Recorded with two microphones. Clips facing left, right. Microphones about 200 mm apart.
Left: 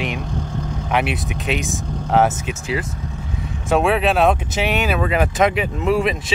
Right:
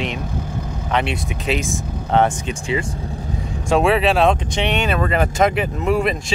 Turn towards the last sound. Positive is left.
turn(degrees=0)  # may be behind; listen again after turning